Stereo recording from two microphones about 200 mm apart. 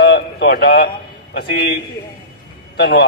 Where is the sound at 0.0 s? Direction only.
55° left (ahead or behind).